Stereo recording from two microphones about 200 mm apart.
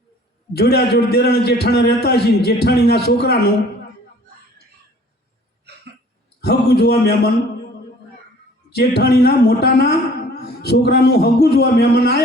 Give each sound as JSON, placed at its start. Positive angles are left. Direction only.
{"t": 0.5, "sound": "a man's voice", "side_deg": 55}
{"t": 6.4, "sound": "a man's voice", "side_deg": 55}
{"t": 8.7, "sound": "a man's voice", "side_deg": 55}